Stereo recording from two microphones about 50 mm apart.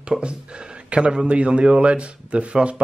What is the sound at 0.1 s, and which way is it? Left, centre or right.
Speech, centre.